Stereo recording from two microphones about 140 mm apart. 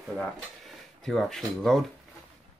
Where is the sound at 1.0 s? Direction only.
5° left (ahead or behind).